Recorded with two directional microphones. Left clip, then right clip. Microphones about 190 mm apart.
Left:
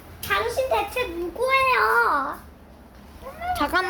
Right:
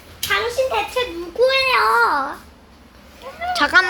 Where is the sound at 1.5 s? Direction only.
45° right (ahead or behind).